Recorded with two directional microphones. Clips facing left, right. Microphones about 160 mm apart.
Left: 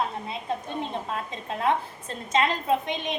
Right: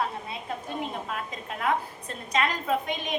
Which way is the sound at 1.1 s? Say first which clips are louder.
Left 3 dB; 30° left (ahead or behind).